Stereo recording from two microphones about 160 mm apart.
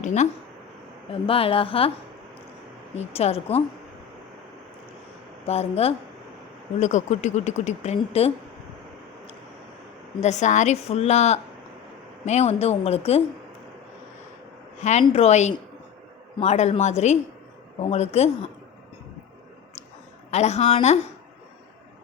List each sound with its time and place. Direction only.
0.0 s speech: 45° left (ahead or behind)
1.3 s a woman's voice: 35° left (ahead or behind)
2.9 s a woman's voice: 40° left (ahead or behind)
5.5 s a woman's voice: 40° left (ahead or behind)
10.2 s a woman's voice: 45° left (ahead or behind)
14.8 s a woman's voice: 45° left (ahead or behind)
20.3 s speech: 45° left (ahead or behind)